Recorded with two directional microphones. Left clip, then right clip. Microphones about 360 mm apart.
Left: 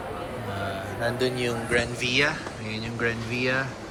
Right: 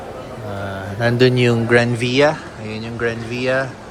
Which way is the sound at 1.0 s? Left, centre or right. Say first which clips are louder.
Right 12 dB; right.